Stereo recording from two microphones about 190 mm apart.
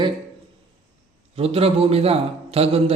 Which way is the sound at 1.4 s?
30° right (ahead or behind).